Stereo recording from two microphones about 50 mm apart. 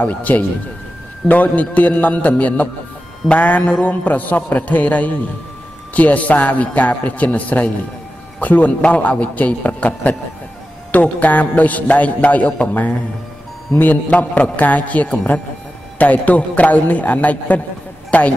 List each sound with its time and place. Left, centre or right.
0.0 s speech: left
13.7 s speech: left
14.1 s speech: left